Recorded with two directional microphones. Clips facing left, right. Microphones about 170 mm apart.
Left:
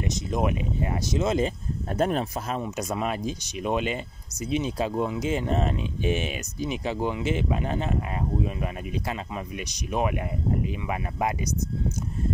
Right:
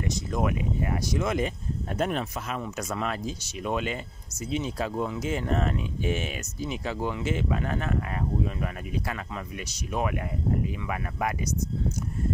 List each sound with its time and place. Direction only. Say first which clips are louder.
0.0 s speech: left 2 dB; 20° left (ahead or behind); by 2.6 s 35° left (ahead or behind)
2.6 s speech: left 3 dB; 20° left (ahead or behind)